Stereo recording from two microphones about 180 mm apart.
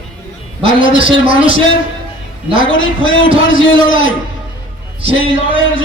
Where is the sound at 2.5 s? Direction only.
90° left.